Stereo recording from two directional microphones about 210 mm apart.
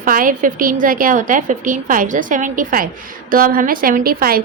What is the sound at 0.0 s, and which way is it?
A woman's voice, 40° right (ahead or behind).